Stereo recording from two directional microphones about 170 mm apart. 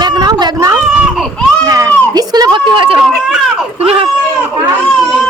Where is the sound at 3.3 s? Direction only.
5° right (ahead or behind).